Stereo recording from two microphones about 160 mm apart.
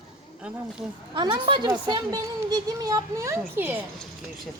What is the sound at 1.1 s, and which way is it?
A woman's voice, 30° right (ahead or behind).